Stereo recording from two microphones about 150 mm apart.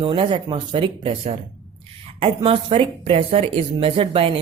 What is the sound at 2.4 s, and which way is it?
A woman's voice, 35° right (ahead or behind).